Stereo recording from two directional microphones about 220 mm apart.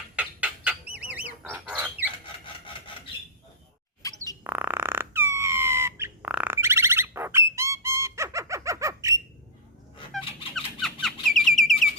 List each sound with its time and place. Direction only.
0.2 s bird: 5° right (ahead or behind)
4.0 s chirp: 15° left (ahead or behind)
4.4 s squeak: 10° right (ahead or behind)
10.1 s a sound: centre (ahead or behind)